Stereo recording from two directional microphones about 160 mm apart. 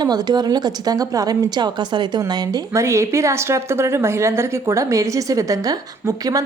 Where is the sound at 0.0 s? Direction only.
25° right (ahead or behind).